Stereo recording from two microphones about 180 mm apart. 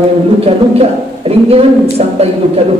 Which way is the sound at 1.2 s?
35° right (ahead or behind).